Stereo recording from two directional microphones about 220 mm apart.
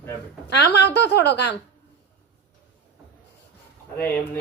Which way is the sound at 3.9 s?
10° left (ahead or behind).